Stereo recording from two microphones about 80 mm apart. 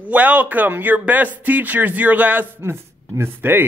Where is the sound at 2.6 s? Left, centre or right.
Right.